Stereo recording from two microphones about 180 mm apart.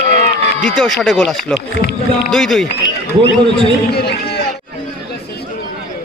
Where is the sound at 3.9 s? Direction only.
65° left (ahead or behind).